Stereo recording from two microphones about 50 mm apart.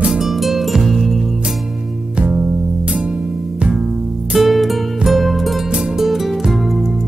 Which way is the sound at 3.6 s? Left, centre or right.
Centre.